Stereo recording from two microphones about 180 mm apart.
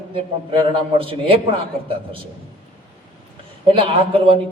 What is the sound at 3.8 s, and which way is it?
Speech, 30° right (ahead or behind).